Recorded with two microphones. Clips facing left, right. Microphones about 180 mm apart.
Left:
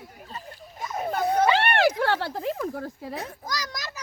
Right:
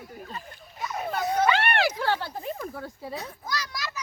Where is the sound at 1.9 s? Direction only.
65° left (ahead or behind); by 2.8 s 85° left.